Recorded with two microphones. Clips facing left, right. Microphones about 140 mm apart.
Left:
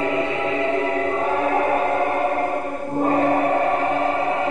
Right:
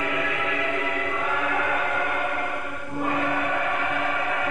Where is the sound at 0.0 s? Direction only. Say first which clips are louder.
Left 6 dB; 30° left (ahead or behind).